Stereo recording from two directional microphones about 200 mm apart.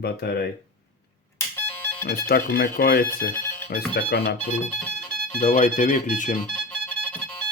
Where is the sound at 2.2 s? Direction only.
50° left (ahead or behind).